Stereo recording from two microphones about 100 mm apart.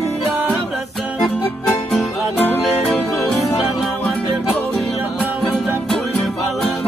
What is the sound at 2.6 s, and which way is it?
Music, 5° left (ahead or behind).